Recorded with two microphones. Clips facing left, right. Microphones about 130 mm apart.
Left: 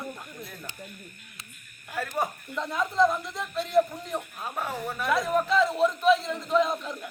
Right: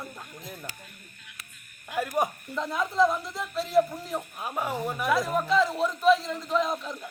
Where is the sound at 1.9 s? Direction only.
15° right (ahead or behind).